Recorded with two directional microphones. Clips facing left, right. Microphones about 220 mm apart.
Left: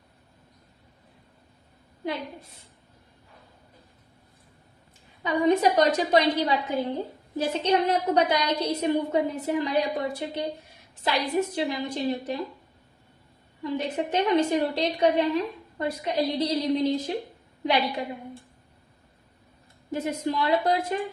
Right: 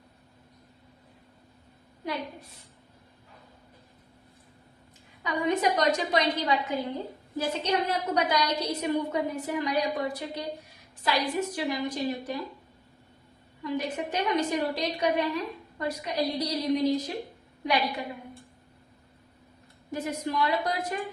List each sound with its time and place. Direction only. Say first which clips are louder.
5.2 s a woman's voice: left 5 dB; 30° left (ahead or behind)
13.6 s a woman's voice: left 2 dB; 25° left (ahead or behind)
19.9 s a woman's voice: left 3 dB; 25° left (ahead or behind)